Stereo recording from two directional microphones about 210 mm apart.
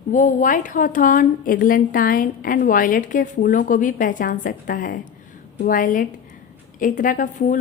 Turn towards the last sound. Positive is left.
turn(degrees=35)  # may be behind; listen again after turning